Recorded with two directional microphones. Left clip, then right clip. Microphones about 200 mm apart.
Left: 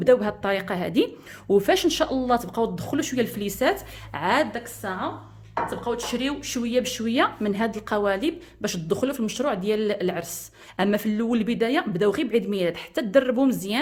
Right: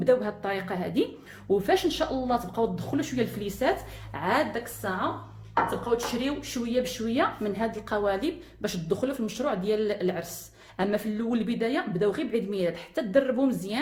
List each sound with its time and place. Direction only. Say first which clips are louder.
0.0 s a woman's voice: left 5 dB; 50° left (ahead or behind)